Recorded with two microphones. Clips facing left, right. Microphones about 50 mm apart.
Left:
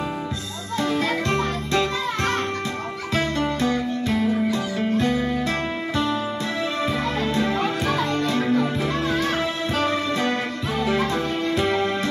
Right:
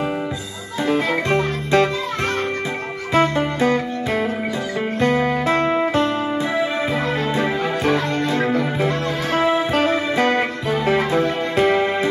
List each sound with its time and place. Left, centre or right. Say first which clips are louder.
0.8 s music: right 5 dB; right
3.2 s music: right 6 dB; centre
3.6 s music: right 3 dB; right
5.6 s music: right 7 dB; right
11.5 s music: right 6 dB; right